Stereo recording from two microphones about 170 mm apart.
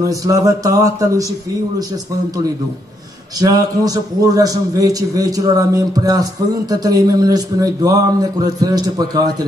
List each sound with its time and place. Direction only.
0.0 s a man's voice: 20° right (ahead or behind)
3.3 s a man's voice: 20° right (ahead or behind)